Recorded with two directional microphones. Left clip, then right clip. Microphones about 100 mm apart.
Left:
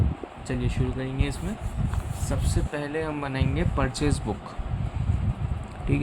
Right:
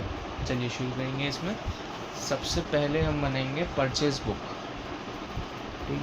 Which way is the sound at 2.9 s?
65° left (ahead or behind).